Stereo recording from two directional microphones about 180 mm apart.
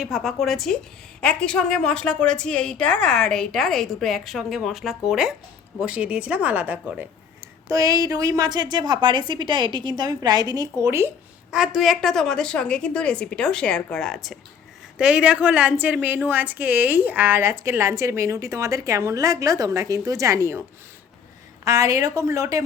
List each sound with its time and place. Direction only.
0.0 s a woman's voice: centre (ahead or behind)
11.5 s a woman's voice: centre (ahead or behind)